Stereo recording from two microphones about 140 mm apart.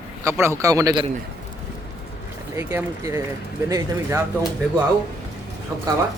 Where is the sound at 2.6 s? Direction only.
20° right (ahead or behind).